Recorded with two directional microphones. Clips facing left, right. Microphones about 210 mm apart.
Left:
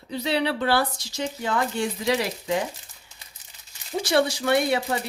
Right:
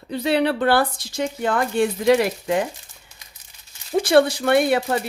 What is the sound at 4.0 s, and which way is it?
Speech, 55° right (ahead or behind).